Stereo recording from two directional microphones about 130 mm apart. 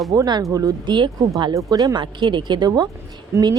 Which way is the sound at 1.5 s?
25° right (ahead or behind).